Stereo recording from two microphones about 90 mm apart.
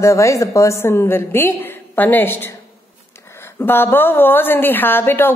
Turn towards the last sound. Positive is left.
turn(degrees=25)  # may be behind; listen again after turning